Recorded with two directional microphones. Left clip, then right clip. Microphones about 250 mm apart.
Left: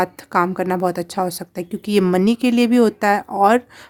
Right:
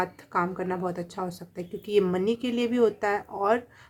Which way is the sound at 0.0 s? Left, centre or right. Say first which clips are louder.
Left 9 dB; left.